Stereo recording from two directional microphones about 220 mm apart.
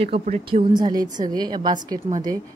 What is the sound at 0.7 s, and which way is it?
A woman's voice, 20° right (ahead or behind).